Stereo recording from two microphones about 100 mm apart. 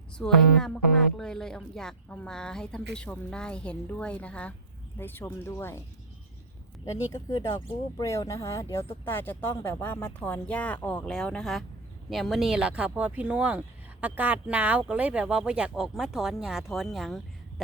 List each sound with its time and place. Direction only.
0.2 s speech: 5° left (ahead or behind); by 5.8 s 25° left (ahead or behind)
6.8 s speech: 35° left (ahead or behind); by 17.2 s centre (ahead or behind)